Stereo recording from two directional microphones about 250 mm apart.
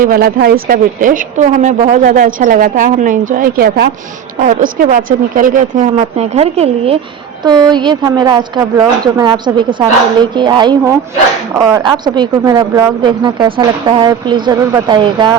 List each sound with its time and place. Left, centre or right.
0.0 s a woman's voice: right; by 15.4 s centre